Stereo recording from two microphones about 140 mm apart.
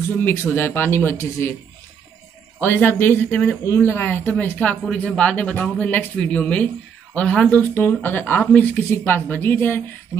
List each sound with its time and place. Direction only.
0.2 s speech: 15° left (ahead or behind)
2.6 s speech: 15° left (ahead or behind)